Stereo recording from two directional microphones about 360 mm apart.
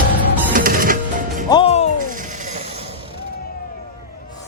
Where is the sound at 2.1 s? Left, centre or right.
Right.